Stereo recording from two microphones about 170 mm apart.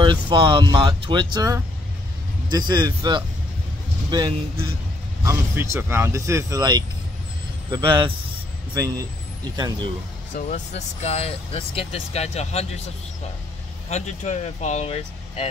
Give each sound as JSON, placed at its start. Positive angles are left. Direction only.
{"t": 0.0, "sound": "speech", "side_deg": -30}
{"t": 9.6, "sound": "speech", "side_deg": -25}
{"t": 10.3, "sound": "speech", "side_deg": 45}
{"t": 13.8, "sound": "speech", "side_deg": 40}